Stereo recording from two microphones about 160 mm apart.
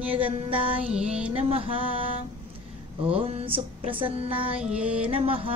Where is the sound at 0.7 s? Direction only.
5° right (ahead or behind).